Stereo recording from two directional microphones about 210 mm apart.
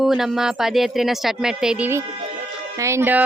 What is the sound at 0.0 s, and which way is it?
Speech, centre (ahead or behind).